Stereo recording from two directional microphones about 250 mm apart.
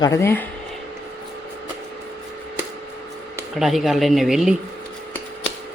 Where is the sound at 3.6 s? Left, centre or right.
Centre.